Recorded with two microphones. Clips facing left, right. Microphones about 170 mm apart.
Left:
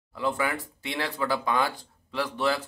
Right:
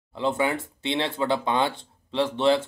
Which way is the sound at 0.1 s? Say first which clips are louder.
Right 4 dB; 25° right (ahead or behind).